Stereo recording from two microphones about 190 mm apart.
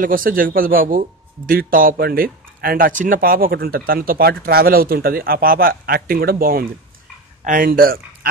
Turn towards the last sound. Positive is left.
turn(degrees=-50)  # may be behind; listen again after turning